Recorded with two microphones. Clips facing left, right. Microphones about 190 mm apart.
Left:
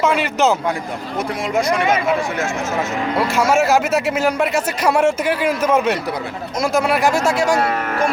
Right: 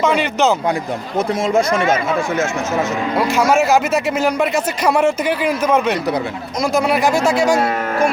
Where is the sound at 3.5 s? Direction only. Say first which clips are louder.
Even; centre (ahead or behind).